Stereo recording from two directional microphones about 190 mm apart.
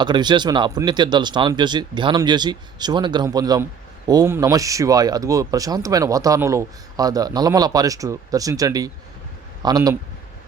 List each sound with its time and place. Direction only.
0.0 s speech: 25° right (ahead or behind)